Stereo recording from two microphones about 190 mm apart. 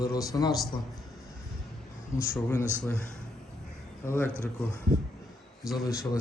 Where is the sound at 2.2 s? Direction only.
15° left (ahead or behind).